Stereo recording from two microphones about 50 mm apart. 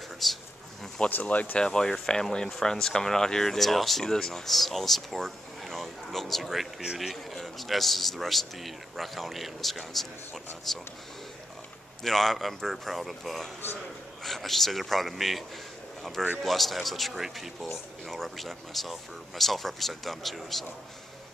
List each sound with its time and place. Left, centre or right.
0.2 s speech: centre
1.2 s speech: left
1.6 s speech: centre
12.0 s speech: centre